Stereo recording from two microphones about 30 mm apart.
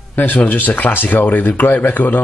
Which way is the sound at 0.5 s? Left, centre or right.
Left.